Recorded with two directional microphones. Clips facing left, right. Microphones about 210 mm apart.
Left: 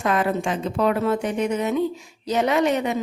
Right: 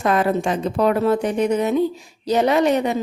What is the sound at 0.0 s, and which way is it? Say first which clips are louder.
A woman's voice: right 3 dB; 35° right (ahead or behind).